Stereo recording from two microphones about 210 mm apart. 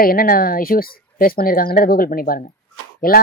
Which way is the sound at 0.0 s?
45° left (ahead or behind).